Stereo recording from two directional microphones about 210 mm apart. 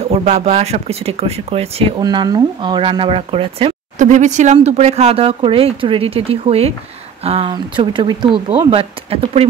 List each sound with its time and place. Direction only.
0.1 s speech: 30° right (ahead or behind)